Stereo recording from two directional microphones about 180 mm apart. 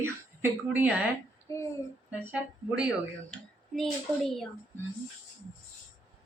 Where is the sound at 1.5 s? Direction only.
15° left (ahead or behind).